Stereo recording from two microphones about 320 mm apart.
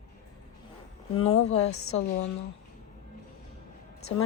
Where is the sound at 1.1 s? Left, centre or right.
Left.